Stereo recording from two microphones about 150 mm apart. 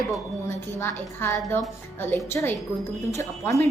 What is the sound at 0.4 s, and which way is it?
Speech, 15° left (ahead or behind).